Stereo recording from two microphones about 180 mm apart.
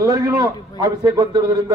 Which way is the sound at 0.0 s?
20° right (ahead or behind).